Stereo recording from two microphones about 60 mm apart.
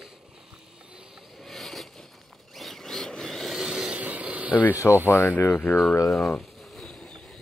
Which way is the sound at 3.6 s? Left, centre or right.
Centre.